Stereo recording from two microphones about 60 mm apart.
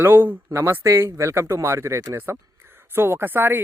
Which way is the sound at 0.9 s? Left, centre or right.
Right.